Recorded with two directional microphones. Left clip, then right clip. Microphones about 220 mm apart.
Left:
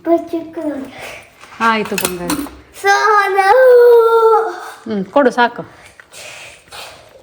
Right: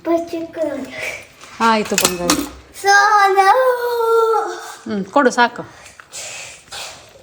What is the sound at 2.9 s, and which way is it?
Child singing, 45° left (ahead or behind).